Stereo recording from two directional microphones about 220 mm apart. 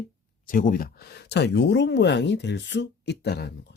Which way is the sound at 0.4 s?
40° left (ahead or behind).